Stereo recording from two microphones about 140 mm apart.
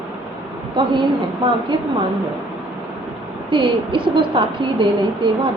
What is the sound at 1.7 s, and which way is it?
Speech, 35° right (ahead or behind).